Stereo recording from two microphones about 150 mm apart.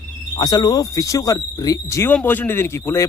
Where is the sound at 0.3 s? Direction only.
25° left (ahead or behind).